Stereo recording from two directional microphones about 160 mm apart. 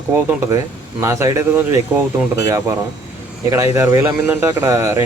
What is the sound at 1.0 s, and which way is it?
A man's voice, 20° right (ahead or behind).